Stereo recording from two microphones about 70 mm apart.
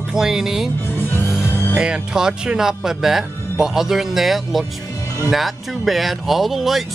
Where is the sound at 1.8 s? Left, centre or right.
Centre.